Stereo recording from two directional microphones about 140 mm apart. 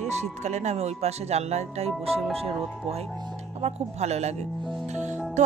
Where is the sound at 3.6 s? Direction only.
50° right (ahead or behind).